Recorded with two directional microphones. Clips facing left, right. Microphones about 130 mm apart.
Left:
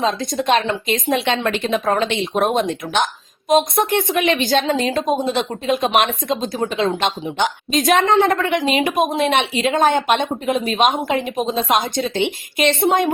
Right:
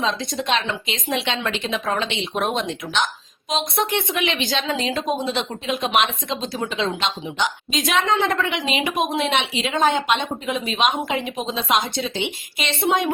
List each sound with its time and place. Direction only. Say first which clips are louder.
0.0 s a woman's voice: left 4 dB; 45° left (ahead or behind)